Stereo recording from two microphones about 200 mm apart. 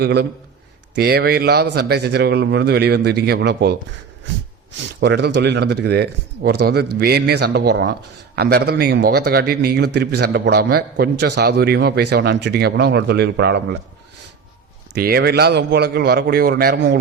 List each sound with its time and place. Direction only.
0.0 s speech: 55° right (ahead or behind)
4.8 s a man's voice: 60° right (ahead or behind)
14.9 s a man's voice: 55° right (ahead or behind)